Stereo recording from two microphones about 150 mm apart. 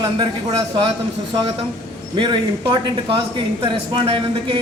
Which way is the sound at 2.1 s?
30° right (ahead or behind).